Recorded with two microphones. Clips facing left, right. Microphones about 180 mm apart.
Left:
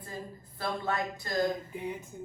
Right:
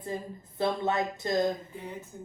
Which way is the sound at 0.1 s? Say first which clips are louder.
Right 2 dB; 20° right (ahead or behind).